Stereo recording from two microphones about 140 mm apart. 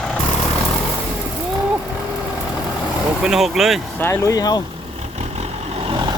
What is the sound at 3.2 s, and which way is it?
Speech, 5° right (ahead or behind).